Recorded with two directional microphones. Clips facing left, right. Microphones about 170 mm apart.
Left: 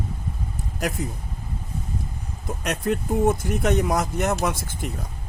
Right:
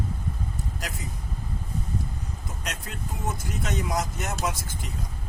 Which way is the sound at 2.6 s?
60° left (ahead or behind).